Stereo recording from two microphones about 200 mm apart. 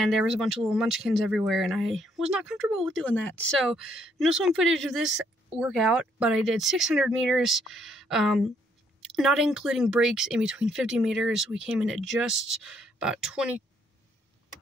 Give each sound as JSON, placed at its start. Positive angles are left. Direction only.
{"t": 0.0, "sound": "speech", "side_deg": 0}